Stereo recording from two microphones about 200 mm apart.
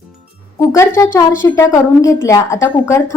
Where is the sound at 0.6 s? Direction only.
15° left (ahead or behind).